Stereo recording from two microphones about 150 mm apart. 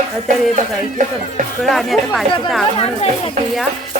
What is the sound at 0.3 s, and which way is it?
Speech, 60° right (ahead or behind).